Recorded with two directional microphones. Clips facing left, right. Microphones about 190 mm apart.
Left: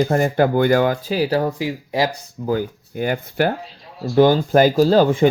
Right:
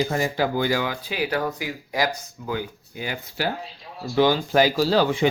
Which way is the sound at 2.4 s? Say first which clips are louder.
Left 8 dB; 45° left (ahead or behind).